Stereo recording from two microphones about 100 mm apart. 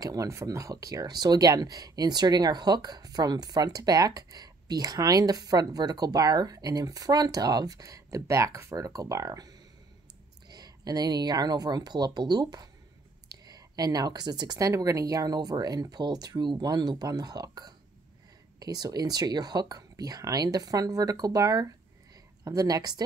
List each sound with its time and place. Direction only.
0.0 s speech: 35° right (ahead or behind)